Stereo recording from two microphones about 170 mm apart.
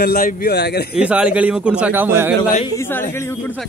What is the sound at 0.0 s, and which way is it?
Speech, 55° left (ahead or behind).